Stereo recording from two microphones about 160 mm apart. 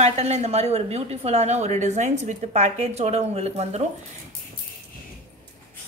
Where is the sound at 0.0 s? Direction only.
45° right (ahead or behind).